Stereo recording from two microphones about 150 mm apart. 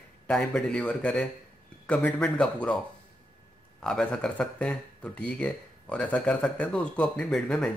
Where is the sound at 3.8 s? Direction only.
5° left (ahead or behind).